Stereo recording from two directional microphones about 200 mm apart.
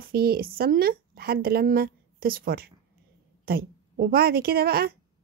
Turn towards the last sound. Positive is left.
turn(degrees=-50)  # may be behind; listen again after turning